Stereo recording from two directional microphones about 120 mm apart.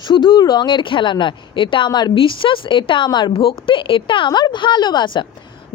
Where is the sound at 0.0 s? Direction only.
40° left (ahead or behind).